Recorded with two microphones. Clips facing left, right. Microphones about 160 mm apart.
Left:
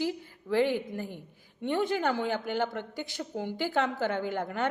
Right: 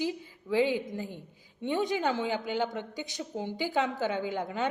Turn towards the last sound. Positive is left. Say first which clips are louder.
# left 1 dB
turn(degrees=-15)  # may be behind; listen again after turning